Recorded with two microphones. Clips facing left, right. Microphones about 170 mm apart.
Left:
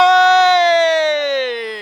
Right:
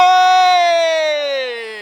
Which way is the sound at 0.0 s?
15° right (ahead or behind).